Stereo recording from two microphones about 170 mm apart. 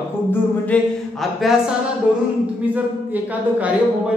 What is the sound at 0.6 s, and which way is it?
Speech, 5° left (ahead or behind).